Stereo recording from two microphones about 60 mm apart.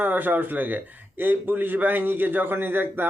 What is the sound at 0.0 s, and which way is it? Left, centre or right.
A man's voice, right.